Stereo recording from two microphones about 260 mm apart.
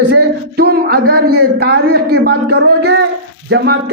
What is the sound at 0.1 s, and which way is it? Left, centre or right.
Speech, right.